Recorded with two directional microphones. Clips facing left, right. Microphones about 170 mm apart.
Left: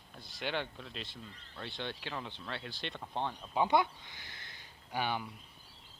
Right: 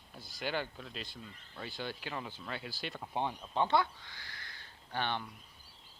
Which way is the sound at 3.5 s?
10° left (ahead or behind).